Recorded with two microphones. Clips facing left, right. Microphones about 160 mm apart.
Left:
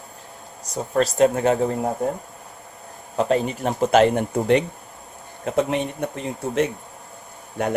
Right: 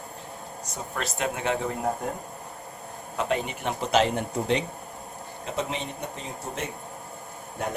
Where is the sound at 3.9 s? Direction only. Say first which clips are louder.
Left 6 dB; 55° left (ahead or behind).